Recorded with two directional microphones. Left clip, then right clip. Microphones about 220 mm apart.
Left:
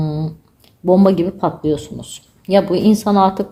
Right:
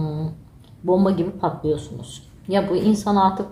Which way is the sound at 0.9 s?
45° left (ahead or behind).